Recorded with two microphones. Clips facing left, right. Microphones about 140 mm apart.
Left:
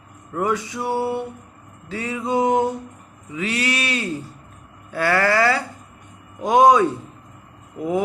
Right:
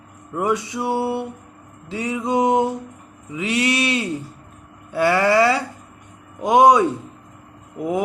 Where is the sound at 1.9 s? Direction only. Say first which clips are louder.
Right 1 dB; 20° right (ahead or behind).